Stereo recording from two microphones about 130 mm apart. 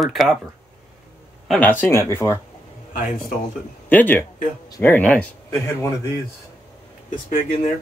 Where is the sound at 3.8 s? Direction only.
15° left (ahead or behind).